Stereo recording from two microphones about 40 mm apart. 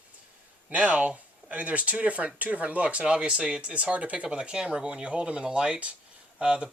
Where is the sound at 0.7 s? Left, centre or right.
Right.